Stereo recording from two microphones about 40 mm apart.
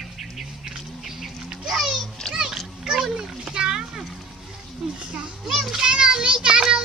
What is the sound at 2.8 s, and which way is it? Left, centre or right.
Splash, centre.